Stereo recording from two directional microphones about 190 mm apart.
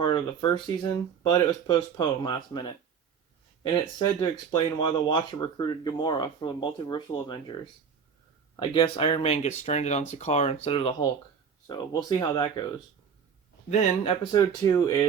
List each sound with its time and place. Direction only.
0.0 s speech: 25° left (ahead or behind)
13.7 s speech: 35° left (ahead or behind); by 15.0 s 20° left (ahead or behind)